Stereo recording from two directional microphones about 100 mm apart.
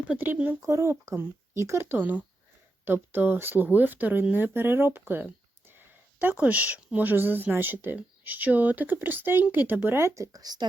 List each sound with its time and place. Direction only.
0.1 s speech: 15° right (ahead or behind)
0.7 s speech: 30° right (ahead or behind)